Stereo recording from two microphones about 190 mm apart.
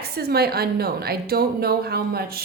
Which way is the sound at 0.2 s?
55° right (ahead or behind).